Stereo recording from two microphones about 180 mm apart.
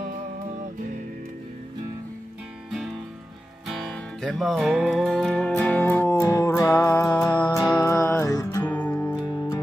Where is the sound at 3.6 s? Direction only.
Centre (ahead or behind); by 8.7 s 20° left (ahead or behind).